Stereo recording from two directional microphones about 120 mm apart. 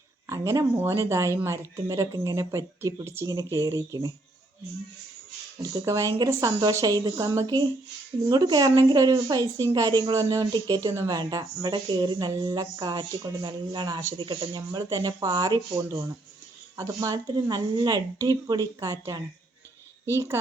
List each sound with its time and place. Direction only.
0.3 s speech: 25° right (ahead or behind)
5.7 s speech: 25° right (ahead or behind)